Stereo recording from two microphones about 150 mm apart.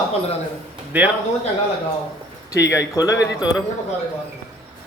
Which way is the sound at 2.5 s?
20° left (ahead or behind).